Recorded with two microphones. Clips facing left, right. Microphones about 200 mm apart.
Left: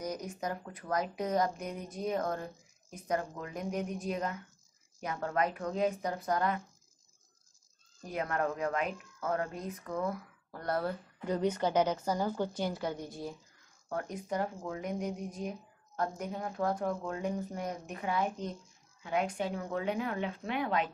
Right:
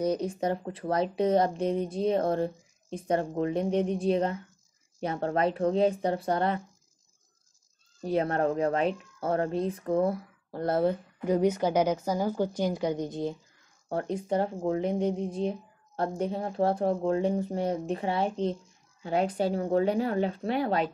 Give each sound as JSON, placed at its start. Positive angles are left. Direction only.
{"t": 0.0, "sound": "speech", "side_deg": -30}
{"t": 8.0, "sound": "speech", "side_deg": -30}
{"t": 11.2, "sound": "a woman's voice", "side_deg": -10}